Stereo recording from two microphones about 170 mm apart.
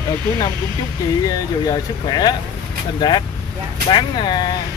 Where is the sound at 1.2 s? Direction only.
20° left (ahead or behind).